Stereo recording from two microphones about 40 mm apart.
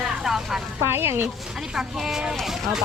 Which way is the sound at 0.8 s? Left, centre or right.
Right.